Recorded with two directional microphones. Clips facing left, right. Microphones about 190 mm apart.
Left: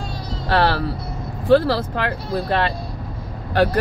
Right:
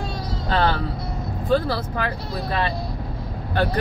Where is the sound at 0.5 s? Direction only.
70° left (ahead or behind).